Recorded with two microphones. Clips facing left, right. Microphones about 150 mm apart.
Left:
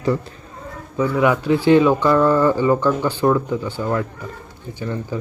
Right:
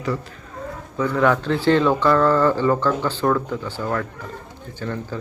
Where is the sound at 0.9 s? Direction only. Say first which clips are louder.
Left 1 dB; 10° left (ahead or behind).